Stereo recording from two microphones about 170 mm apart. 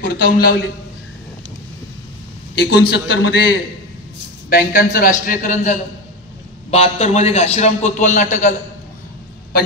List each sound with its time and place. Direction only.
0.0 s a man's voice: 60° left (ahead or behind)
2.5 s a man's voice: 75° left (ahead or behind)
4.5 s a man's voice: 60° left (ahead or behind)
5.2 s a man's voice: 50° left (ahead or behind)